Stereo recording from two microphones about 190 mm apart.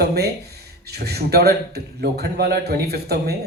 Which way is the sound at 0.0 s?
55° right (ahead or behind).